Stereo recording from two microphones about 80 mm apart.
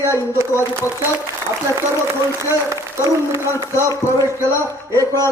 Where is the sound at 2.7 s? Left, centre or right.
Right.